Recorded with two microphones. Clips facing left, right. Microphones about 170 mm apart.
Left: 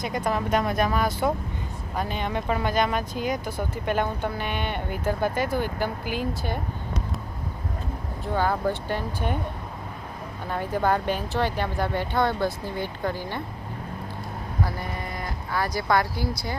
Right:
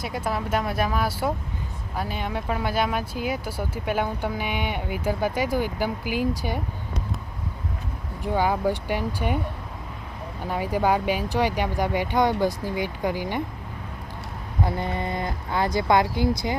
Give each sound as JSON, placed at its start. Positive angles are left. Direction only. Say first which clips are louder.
{"t": 0.0, "sound": "speech", "louder": "left 2 dB", "side_deg": -5}
{"t": 8.2, "sound": "speech", "louder": "right 2 dB", "side_deg": -15}
{"t": 10.4, "sound": "speech", "louder": "right 2 dB", "side_deg": -10}
{"t": 14.6, "sound": "speech", "louder": "right 5 dB", "side_deg": -25}